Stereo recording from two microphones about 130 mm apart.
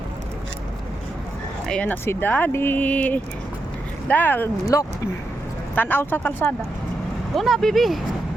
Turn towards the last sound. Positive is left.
turn(degrees=0)  # may be behind; listen again after turning